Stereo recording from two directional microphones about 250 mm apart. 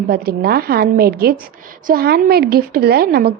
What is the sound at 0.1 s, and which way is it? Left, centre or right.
A woman's voice, right.